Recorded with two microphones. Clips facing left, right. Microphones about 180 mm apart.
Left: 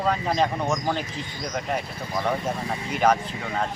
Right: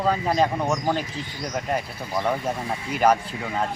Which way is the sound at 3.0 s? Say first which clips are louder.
Right 1 dB; 10° right (ahead or behind).